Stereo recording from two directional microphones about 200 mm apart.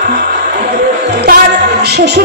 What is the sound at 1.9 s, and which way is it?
Speech, 55° right (ahead or behind).